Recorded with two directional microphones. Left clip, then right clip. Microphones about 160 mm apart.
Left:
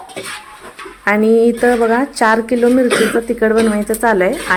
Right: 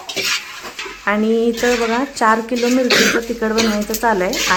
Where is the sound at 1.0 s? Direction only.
25° left (ahead or behind).